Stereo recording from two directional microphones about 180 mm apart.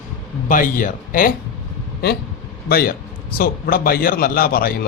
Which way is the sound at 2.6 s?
60° left (ahead or behind).